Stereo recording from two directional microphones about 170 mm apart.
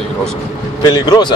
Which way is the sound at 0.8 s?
25° left (ahead or behind).